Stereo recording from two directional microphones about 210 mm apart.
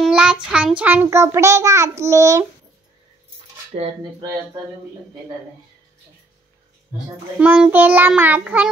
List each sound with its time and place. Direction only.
0.0 s child singing: 5° right (ahead or behind)
0.5 s a child's voice: 5° right (ahead or behind)
3.7 s a sound: 30° right (ahead or behind)
7.3 s a child's voice: 5° right (ahead or behind)